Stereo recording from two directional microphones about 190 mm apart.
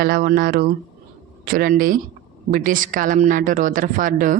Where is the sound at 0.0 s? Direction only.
50° right (ahead or behind).